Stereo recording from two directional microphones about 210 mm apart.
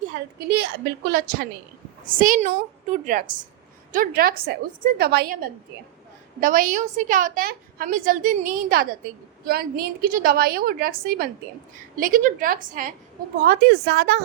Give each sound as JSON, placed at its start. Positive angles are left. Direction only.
{"t": 0.3, "sound": "a woman's voice", "side_deg": -50}
{"t": 13.4, "sound": "a woman's voice", "side_deg": -50}